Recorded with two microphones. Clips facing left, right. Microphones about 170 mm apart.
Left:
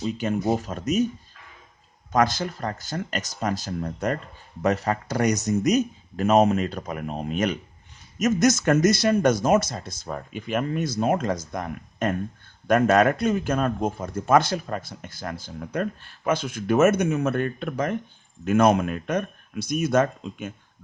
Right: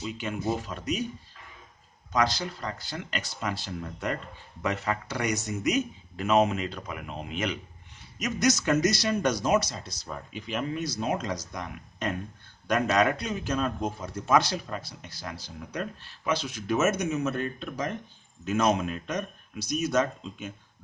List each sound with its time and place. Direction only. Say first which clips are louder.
0.0 s a man's voice: left 6 dB; 40° left (ahead or behind)
2.1 s a man's voice: left 5 dB; 50° left (ahead or behind)